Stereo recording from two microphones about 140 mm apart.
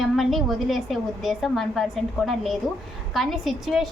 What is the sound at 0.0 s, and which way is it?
A woman's voice, centre (ahead or behind).